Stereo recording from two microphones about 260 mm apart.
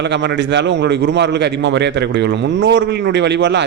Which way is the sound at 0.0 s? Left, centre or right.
Right.